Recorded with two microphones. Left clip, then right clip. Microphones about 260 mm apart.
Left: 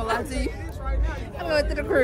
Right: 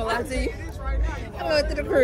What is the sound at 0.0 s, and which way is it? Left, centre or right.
Vehicle, left.